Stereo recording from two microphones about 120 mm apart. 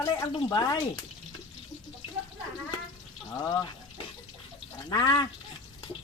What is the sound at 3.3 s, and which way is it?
Speech, 30° left (ahead or behind).